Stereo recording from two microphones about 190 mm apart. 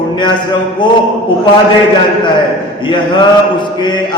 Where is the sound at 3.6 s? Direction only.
25° left (ahead or behind).